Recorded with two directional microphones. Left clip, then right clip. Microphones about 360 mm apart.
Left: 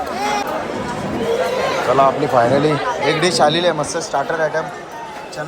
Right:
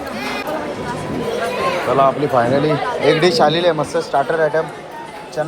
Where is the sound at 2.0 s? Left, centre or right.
Centre.